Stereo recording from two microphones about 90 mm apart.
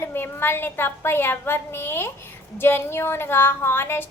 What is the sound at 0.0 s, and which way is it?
A woman's voice, 25° left (ahead or behind).